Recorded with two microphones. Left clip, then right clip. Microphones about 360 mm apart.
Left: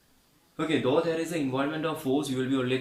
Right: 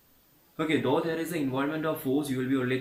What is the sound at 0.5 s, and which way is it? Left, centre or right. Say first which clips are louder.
Speech: left 1 dB; centre.